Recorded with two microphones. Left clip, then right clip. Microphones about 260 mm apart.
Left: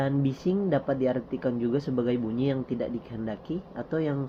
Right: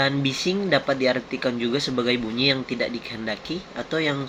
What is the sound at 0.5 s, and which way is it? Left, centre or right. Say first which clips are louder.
Speech: right 1 dB; right.